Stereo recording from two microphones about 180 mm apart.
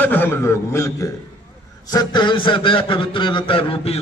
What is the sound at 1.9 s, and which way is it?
A man's voice, 20° left (ahead or behind).